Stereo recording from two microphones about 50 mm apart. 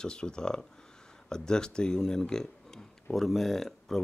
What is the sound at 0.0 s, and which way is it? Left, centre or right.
Speech, centre.